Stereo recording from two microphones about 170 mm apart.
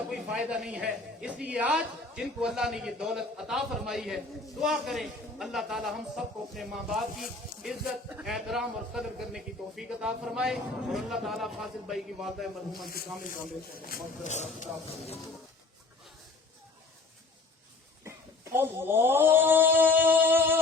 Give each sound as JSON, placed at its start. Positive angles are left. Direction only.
{"t": 0.1, "sound": "a man's voice", "side_deg": -5}
{"t": 13.7, "sound": "speech", "side_deg": 60}
{"t": 14.3, "sound": "speech", "side_deg": 45}
{"t": 18.5, "sound": "a sound", "side_deg": -15}